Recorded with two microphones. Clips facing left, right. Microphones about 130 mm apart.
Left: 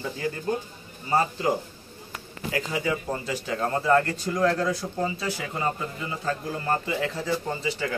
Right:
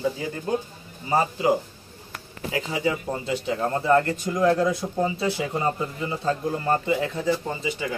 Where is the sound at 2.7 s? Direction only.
25° right (ahead or behind).